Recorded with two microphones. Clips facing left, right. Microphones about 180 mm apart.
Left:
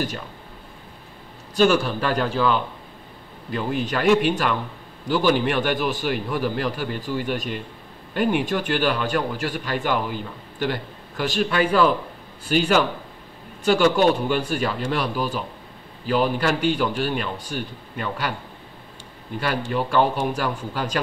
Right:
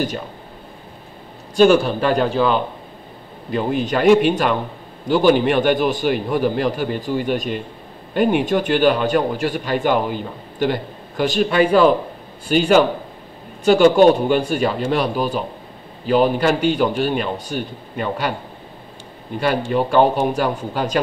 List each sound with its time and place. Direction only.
1.6 s speech: 25° right (ahead or behind)
19.7 s speech: 25° right (ahead or behind)